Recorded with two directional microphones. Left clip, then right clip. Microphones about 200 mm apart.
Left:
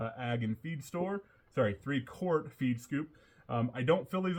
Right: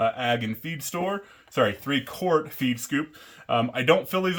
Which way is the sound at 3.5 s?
20° right (ahead or behind).